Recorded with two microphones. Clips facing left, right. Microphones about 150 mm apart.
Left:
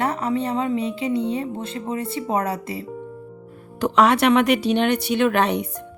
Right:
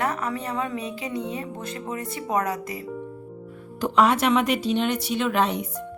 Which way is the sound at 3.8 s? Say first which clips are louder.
Left 3 dB; 75° left (ahead or behind).